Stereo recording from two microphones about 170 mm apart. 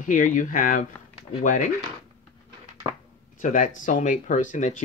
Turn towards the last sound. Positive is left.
turn(degrees=45)  # may be behind; listen again after turning